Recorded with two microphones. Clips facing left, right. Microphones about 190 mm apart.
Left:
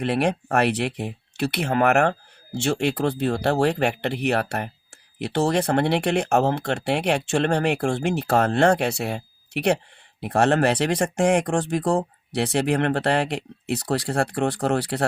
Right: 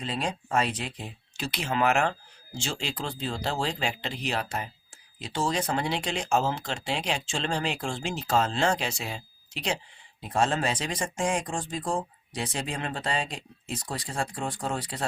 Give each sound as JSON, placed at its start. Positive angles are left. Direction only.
{"t": 0.0, "sound": "speech", "side_deg": 70}